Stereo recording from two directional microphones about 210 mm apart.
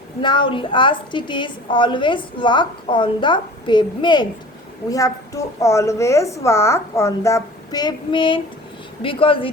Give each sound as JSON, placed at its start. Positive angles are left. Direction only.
{"t": 0.2, "sound": "a woman's voice", "side_deg": 20}